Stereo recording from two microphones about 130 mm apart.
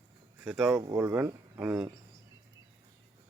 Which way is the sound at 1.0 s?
20° right (ahead or behind).